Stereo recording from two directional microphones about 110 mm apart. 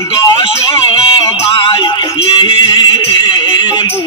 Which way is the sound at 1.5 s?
45° left (ahead or behind).